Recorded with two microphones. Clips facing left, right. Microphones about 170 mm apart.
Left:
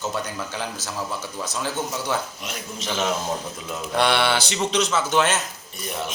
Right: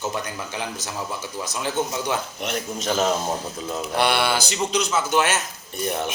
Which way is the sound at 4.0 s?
5° right (ahead or behind).